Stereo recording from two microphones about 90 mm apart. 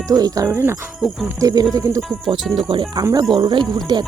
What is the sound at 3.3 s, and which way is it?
Speech, 60° right (ahead or behind).